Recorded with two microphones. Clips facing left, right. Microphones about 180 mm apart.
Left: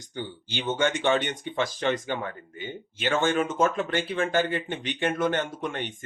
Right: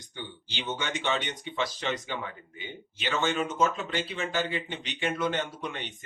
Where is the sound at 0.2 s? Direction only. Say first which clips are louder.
Left 6 dB; 50° left (ahead or behind).